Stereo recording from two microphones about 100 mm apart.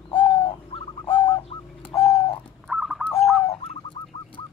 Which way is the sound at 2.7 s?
5° right (ahead or behind).